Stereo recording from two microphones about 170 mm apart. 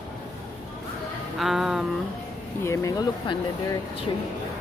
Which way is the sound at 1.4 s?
Centre (ahead or behind).